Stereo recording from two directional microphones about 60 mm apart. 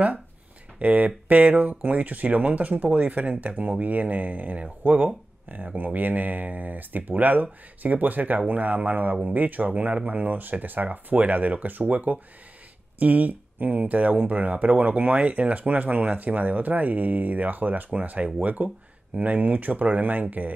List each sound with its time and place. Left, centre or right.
0.7 s speech: right